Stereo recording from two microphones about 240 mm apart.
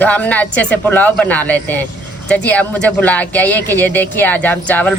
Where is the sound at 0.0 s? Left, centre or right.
Centre.